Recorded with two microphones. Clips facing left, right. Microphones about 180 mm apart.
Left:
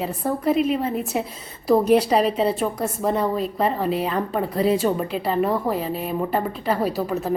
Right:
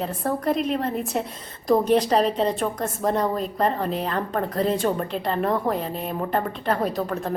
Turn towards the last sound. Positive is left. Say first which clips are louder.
# left 3 dB
turn(degrees=5)  # may be behind; listen again after turning